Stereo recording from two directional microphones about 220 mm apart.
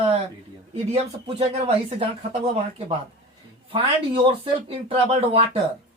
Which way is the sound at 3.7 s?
25° right (ahead or behind).